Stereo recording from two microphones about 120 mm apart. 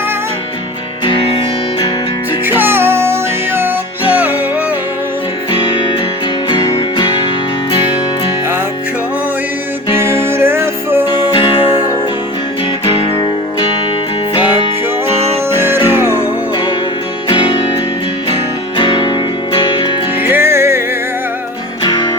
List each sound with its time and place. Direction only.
2.5 s music: 20° right (ahead or behind)
6.5 s music: 40° left (ahead or behind)
9.9 s music: 20° right (ahead or behind)
11.3 s music: 45° left (ahead or behind)
12.8 s music: 40° left (ahead or behind)
15.4 s music: 20° right (ahead or behind)
18.8 s music: 40° left (ahead or behind)
20.2 s music: 20° right (ahead or behind)
21.8 s music: 40° left (ahead or behind)